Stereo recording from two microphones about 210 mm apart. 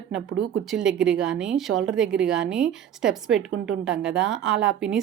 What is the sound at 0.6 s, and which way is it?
A woman's voice, 5° right (ahead or behind).